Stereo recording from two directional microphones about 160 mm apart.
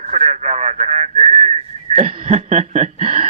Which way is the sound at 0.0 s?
45° right (ahead or behind).